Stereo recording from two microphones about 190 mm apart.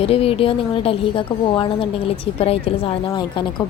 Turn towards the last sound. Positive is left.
turn(degrees=25)  # may be behind; listen again after turning